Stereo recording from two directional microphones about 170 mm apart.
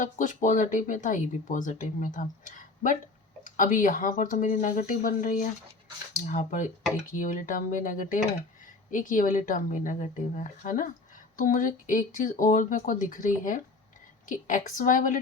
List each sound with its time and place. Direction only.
0.0 s speech: 50° left (ahead or behind)